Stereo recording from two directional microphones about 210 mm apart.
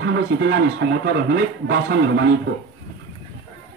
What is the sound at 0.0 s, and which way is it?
Speech, 55° right (ahead or behind).